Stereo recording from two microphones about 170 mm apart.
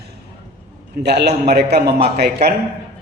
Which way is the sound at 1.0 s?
80° right.